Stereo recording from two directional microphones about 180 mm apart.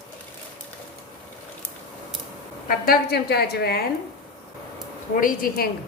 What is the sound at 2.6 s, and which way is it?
A woman's voice, 55° left (ahead or behind).